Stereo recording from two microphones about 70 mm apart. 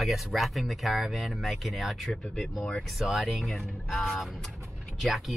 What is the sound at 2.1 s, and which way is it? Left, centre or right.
Mantra, centre.